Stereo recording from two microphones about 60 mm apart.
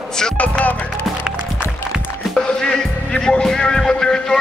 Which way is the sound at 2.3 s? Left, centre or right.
Centre.